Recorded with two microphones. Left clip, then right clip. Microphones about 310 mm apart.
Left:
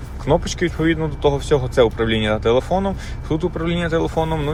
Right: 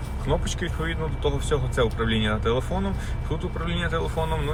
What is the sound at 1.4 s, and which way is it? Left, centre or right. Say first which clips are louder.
Speech: left 8 dB; centre.